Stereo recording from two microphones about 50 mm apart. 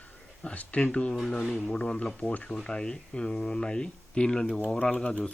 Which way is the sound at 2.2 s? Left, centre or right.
Left.